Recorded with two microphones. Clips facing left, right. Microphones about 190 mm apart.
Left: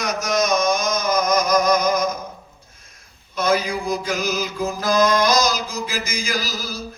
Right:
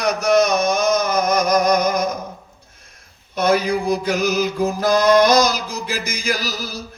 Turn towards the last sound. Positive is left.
turn(degrees=-60)  # may be behind; listen again after turning